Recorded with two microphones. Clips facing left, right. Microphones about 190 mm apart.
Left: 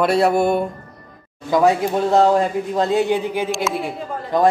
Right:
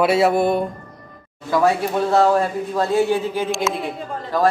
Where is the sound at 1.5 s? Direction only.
20° left (ahead or behind).